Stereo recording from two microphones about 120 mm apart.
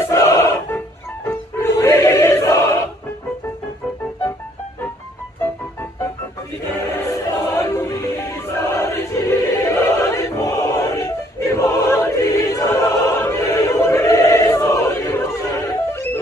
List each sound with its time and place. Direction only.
0.1 s music: 25° left (ahead or behind)
5.4 s music: 20° left (ahead or behind)